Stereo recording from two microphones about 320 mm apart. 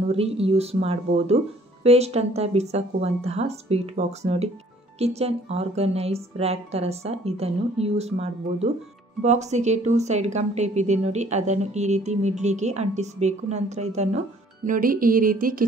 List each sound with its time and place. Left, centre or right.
0.1 s speech: centre